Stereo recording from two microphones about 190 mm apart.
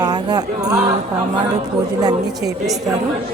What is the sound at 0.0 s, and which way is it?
Music, 20° right (ahead or behind).